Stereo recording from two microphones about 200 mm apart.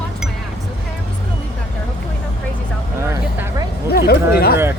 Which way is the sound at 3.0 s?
15° right (ahead or behind).